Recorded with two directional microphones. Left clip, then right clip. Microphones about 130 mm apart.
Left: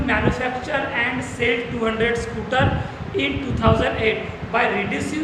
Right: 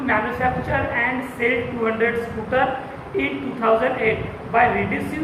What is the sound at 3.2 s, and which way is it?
A woman's voice, 35° left (ahead or behind).